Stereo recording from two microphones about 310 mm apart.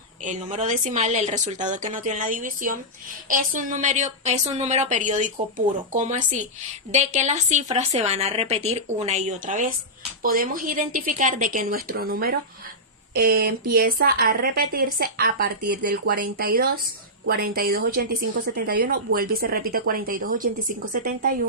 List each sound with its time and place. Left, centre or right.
0.2 s a woman's voice: right